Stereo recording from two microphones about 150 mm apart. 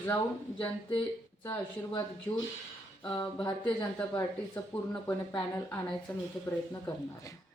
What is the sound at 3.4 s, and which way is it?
Speech, 30° left (ahead or behind).